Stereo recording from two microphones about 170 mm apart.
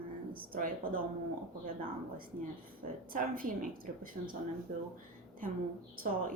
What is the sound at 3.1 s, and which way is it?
Speech, 55° right (ahead or behind).